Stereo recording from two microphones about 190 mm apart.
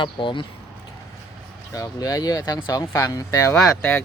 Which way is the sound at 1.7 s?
20° left (ahead or behind).